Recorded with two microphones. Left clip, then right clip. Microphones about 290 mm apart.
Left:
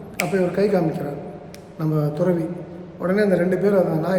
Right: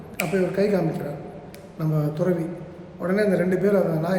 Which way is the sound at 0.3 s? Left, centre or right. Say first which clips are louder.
Left 2 dB; centre.